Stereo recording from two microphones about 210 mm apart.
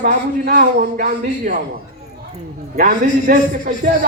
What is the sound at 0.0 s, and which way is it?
Speech, 35° right (ahead or behind).